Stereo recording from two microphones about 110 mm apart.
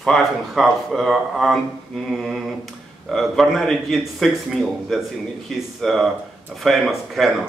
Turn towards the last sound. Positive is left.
turn(degrees=0)  # may be behind; listen again after turning